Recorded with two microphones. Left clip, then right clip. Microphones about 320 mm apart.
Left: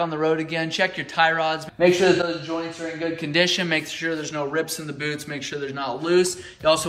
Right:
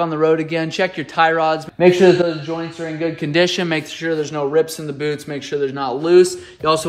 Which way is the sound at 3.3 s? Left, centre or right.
Centre.